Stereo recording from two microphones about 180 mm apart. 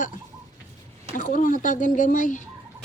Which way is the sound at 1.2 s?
50° left (ahead or behind).